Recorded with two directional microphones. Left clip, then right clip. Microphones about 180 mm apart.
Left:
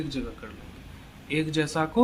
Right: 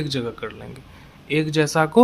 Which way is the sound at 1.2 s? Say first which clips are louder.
Right 7 dB; 30° right (ahead or behind).